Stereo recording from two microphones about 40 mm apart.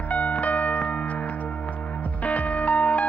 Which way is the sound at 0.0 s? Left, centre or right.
Left.